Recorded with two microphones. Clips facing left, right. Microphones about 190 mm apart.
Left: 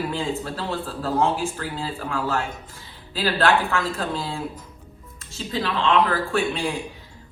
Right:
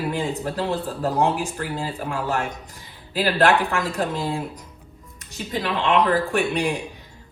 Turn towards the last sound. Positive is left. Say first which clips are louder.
# right 2 dB
turn(degrees=-15)  # may be behind; listen again after turning